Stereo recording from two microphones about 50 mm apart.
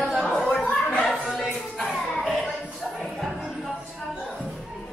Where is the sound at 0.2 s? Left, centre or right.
Centre.